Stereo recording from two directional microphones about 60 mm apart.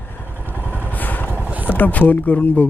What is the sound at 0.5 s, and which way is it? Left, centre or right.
Vehicle, right.